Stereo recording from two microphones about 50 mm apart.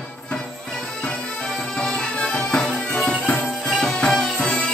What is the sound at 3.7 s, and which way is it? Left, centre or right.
Music, centre.